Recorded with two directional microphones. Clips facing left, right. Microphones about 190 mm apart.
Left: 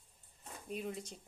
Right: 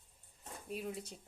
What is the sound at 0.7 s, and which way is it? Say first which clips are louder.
Speech: left 1 dB; centre (ahead or behind).